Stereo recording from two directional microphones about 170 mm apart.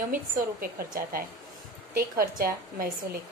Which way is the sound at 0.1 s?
60° right (ahead or behind).